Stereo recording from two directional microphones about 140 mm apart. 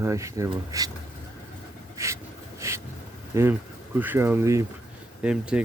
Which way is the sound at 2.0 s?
20° right (ahead or behind).